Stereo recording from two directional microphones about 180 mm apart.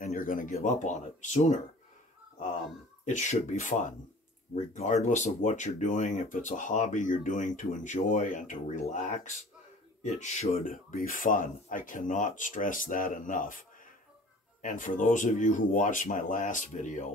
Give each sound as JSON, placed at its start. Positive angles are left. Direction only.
{"t": 0.0, "sound": "speech", "side_deg": 50}
{"t": 2.3, "sound": "a sound", "side_deg": 45}
{"t": 3.1, "sound": "speech", "side_deg": 40}